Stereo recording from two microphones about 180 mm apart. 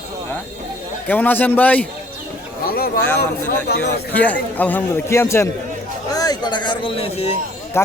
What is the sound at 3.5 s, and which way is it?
Speech, 60° left (ahead or behind).